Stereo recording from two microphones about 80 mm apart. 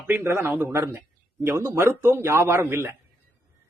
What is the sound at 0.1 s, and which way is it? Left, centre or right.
Speech, right.